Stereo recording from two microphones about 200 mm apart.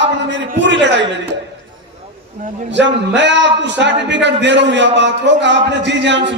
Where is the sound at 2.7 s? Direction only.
60° right (ahead or behind).